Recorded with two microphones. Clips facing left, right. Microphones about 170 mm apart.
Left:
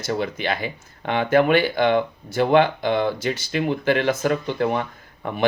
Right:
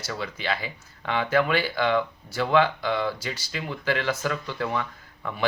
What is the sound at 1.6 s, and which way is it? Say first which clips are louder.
Speech: left 5 dB; 20° left (ahead or behind).